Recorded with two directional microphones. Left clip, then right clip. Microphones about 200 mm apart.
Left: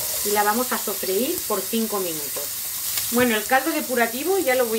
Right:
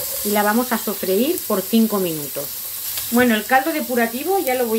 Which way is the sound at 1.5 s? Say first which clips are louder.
Right 2 dB; 45° right (ahead or behind).